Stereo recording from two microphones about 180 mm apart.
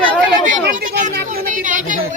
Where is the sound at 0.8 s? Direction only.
45° right (ahead or behind).